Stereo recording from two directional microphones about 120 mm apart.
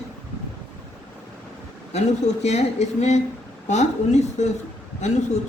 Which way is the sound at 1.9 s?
65° left (ahead or behind).